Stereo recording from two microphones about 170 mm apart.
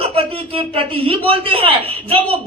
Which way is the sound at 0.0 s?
35° right (ahead or behind).